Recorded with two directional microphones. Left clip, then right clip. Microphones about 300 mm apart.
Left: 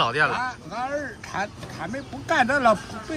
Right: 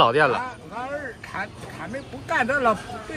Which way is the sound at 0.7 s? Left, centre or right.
Centre.